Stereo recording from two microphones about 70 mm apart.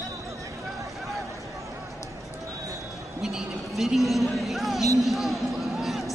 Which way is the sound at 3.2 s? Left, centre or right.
Centre.